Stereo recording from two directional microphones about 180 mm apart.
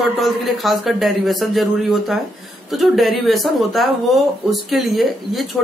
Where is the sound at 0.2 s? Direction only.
Centre (ahead or behind).